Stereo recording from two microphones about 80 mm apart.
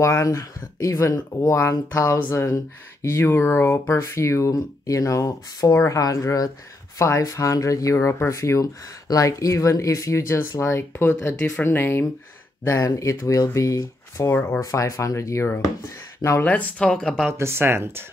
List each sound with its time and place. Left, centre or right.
0.0 s speech: left
12.8 s speech: left
14.3 s speech: left
14.6 s speech: left
16.3 s speech: centre
17.3 s speech: right